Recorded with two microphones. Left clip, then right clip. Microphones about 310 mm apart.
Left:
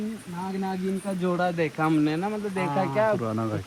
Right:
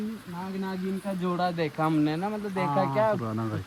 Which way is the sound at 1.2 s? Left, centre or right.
Right.